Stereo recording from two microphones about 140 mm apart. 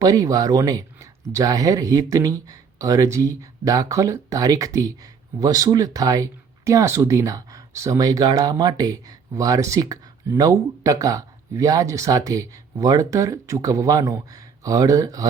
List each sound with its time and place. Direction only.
0.0 s speech: 25° right (ahead or behind)